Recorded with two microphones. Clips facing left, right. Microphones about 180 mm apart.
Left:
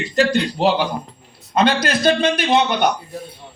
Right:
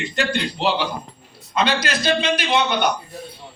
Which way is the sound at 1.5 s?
50° left (ahead or behind).